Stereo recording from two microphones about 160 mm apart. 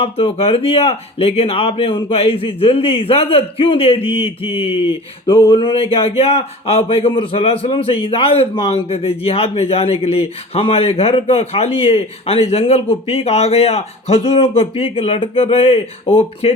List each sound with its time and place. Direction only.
0.0 s a man's voice: 35° left (ahead or behind)